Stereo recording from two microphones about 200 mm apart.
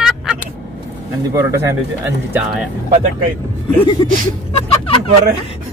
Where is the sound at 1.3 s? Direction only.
15° right (ahead or behind).